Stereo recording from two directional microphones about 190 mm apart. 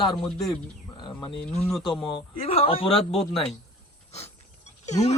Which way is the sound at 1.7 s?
Centre (ahead or behind).